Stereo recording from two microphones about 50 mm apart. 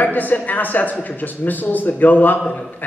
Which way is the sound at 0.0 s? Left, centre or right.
Left.